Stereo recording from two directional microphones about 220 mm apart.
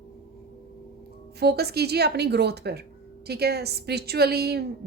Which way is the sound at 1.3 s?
45° right (ahead or behind).